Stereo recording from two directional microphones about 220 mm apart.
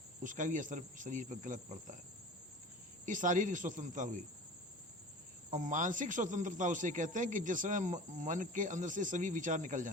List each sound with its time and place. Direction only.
0.2 s speech: 35° right (ahead or behind)
3.1 s speech: 35° right (ahead or behind)
5.5 s speech: 35° right (ahead or behind)